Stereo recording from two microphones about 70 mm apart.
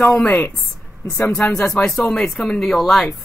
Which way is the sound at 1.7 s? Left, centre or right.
Centre.